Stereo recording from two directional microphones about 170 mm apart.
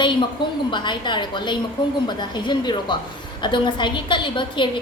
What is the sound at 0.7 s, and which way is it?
A woman's voice, 25° left (ahead or behind).